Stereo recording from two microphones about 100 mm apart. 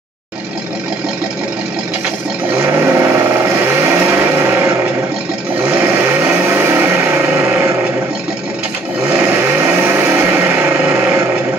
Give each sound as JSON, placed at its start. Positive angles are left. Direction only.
{"t": 2.5, "sound": "vehicle", "side_deg": -25}
{"t": 9.1, "sound": "vehicle", "side_deg": -20}